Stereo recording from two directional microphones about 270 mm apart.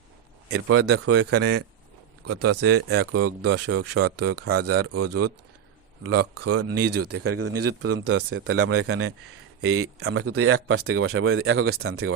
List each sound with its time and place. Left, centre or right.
0.5 s speech: right